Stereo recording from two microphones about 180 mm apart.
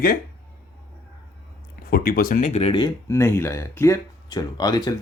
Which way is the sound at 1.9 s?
55° left (ahead or behind).